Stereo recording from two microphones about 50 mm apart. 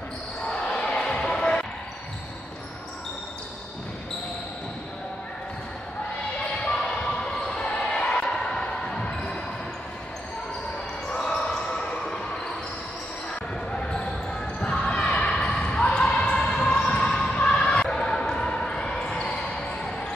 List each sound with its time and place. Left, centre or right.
0.5 s basketball bounce: centre
6.7 s basketball bounce: centre
11.1 s basketball bounce: centre
13.7 s basketball bounce: centre
14.6 s a sound: centre
15.5 s basketball bounce: left